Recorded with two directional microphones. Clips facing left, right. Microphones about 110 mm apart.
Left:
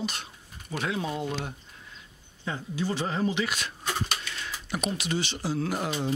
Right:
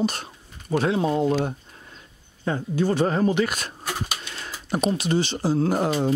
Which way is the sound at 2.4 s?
50° right (ahead or behind).